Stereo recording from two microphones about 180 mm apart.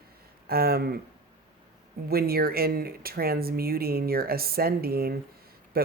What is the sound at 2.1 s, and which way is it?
Speech, 55° right (ahead or behind).